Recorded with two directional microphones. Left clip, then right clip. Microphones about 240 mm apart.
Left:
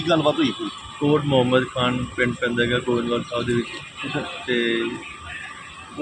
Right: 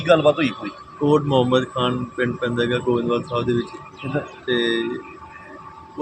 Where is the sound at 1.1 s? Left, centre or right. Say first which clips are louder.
Right 1 dB; centre.